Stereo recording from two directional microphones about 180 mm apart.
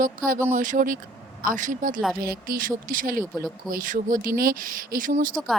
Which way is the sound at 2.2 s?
55° right (ahead or behind).